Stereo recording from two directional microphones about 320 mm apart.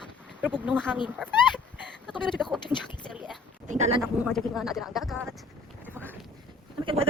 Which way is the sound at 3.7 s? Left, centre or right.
Centre.